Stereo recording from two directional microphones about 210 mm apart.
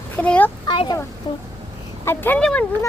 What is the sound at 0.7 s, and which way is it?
Speech, 25° left (ahead or behind).